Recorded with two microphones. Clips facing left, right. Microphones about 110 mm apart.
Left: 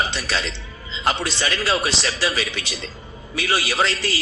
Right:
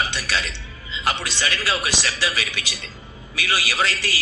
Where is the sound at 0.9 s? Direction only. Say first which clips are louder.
Left 3 dB; 30° left (ahead or behind).